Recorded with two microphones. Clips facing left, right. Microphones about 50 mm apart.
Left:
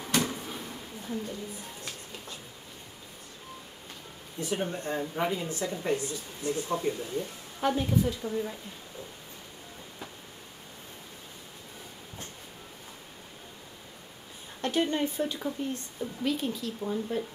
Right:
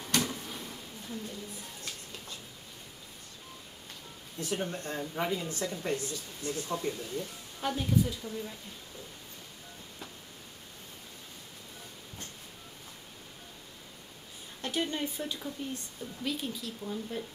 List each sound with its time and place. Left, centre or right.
0.0 s a sound: centre
4.4 s speech: centre
14.6 s speech: centre